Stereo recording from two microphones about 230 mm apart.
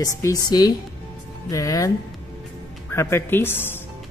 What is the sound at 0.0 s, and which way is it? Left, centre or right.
Speech, centre.